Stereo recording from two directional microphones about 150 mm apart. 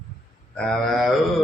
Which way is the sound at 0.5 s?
Centre (ahead or behind).